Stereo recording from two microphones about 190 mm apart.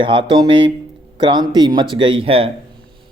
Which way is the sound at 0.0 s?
25° right (ahead or behind).